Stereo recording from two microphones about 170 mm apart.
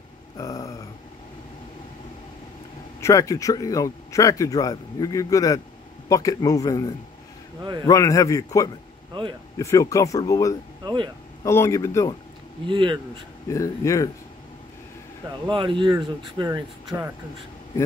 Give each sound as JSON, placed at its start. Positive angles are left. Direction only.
{"t": 0.4, "sound": "a sound", "side_deg": 20}
{"t": 3.0, "sound": "speech", "side_deg": 20}
{"t": 12.6, "sound": "speech", "side_deg": -30}
{"t": 13.5, "sound": "speech", "side_deg": 20}
{"t": 15.4, "sound": "speech", "side_deg": -30}